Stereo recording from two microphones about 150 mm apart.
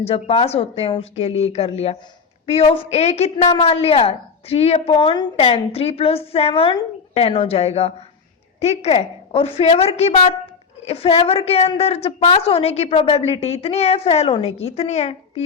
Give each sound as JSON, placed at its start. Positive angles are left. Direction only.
{"t": 0.0, "sound": "a woman's voice", "side_deg": 40}